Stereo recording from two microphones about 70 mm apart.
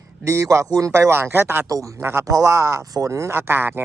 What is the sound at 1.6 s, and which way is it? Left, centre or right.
Speech, right.